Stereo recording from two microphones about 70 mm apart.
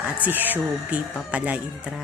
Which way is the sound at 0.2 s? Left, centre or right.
Right.